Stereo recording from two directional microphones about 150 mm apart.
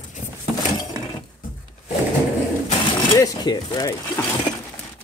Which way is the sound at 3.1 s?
25° left (ahead or behind).